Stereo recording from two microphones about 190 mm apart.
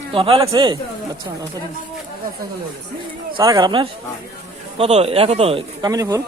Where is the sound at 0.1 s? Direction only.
30° right (ahead or behind).